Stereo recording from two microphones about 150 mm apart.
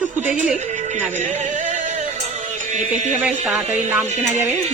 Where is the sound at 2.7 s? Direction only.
55° right (ahead or behind).